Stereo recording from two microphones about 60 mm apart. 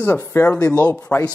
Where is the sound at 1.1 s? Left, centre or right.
Left.